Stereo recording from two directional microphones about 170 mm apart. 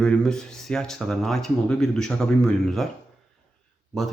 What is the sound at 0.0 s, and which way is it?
Speech, 5° left (ahead or behind).